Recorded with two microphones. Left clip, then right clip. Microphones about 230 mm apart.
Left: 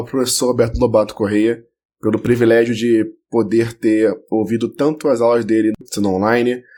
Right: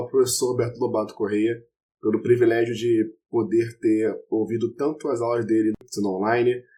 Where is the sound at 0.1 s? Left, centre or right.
Left.